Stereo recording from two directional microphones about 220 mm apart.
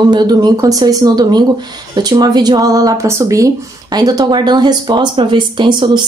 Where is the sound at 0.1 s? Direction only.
20° right (ahead or behind).